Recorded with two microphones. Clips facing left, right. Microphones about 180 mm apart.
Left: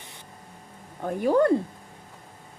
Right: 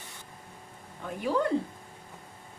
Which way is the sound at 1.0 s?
50° left (ahead or behind).